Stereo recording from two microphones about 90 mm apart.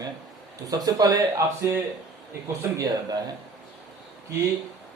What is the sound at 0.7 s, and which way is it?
A man's voice, 45° right (ahead or behind).